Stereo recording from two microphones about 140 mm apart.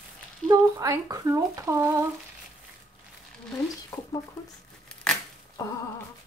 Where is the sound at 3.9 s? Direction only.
20° left (ahead or behind).